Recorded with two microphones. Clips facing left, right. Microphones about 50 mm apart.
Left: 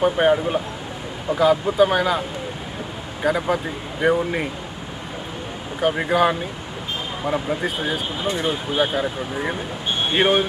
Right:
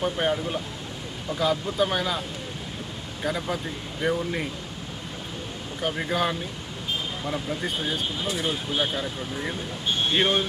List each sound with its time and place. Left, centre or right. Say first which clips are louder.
0.0 s speech: left 8 dB; left
1.4 s speech: left 8 dB; centre
3.2 s speech: left 8 dB; centre
4.0 s speech: left 7 dB; left
5.8 s speech: left 8 dB; left
8.3 s speech: left 6 dB; centre
8.7 s speech: left 6 dB; centre